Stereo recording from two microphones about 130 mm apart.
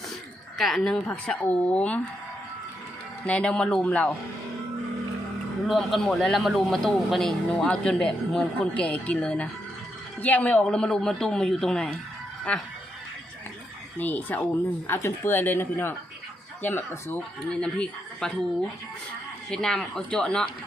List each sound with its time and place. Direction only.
0.6 s a man's voice: 5° left (ahead or behind)
3.2 s a man's voice: 10° left (ahead or behind)
5.6 s a man's voice: centre (ahead or behind)
14.0 s a man's voice: 15° left (ahead or behind)
17.5 s a woman's voice: 5° left (ahead or behind)
19.5 s speech: 5° left (ahead or behind)